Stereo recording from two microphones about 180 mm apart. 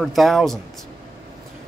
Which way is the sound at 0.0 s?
Centre (ahead or behind).